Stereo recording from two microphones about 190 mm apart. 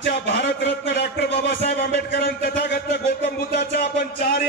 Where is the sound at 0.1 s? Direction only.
55° left (ahead or behind).